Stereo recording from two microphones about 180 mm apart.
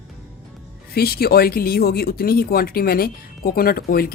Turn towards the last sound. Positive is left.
turn(degrees=55)  # may be behind; listen again after turning